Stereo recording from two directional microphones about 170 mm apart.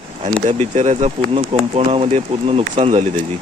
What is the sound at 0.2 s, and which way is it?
Speech, 40° right (ahead or behind).